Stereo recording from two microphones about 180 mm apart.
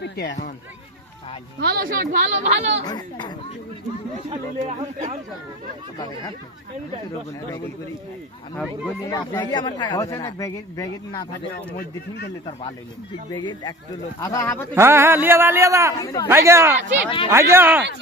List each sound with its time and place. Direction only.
0.0 s a sound: 65° left (ahead or behind)
1.5 s speech: 60° right (ahead or behind); by 2.6 s 40° right (ahead or behind)
2.8 s speech: 25° left (ahead or behind)
9.0 s speech: 20° left (ahead or behind)
11.5 s a man's voice: 60° left (ahead or behind)
13.3 s speech: 25° left (ahead or behind)
14.8 s a man's voice: 15° right (ahead or behind)
16.0 s speech: 20° left (ahead or behind)
16.3 s a man's voice: 15° right (ahead or behind)